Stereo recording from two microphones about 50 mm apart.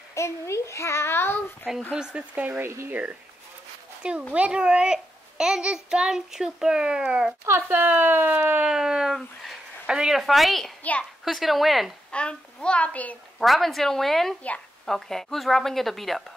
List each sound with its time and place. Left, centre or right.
0.1 s a child's voice: left
2.0 s speech: centre
2.4 s speech: right
4.3 s a child's voice: right
7.4 s speech: right
8.6 s speech: centre
9.8 s a woman's voice: centre
10.1 s a woman's voice: centre
10.8 s a child's voice: left
11.2 s a woman's voice: centre
12.1 s a child's voice: left
13.4 s a woman's voice: centre